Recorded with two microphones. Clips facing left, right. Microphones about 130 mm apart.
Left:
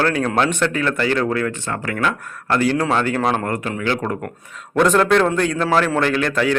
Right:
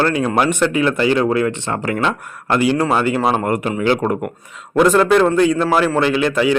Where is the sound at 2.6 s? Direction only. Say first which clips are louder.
Right 2 dB; 10° right (ahead or behind).